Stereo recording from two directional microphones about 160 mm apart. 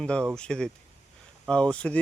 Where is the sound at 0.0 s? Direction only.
5° left (ahead or behind).